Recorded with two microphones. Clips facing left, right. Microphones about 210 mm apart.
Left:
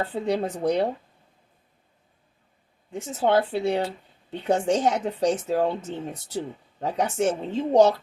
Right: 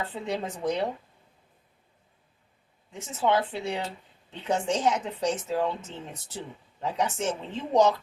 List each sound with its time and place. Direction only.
0.0 s speech: 40° left (ahead or behind)
2.9 s speech: 40° left (ahead or behind)
6.7 s speech: 40° left (ahead or behind)